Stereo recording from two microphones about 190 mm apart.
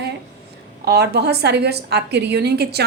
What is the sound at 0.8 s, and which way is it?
A woman's voice, 60° right (ahead or behind).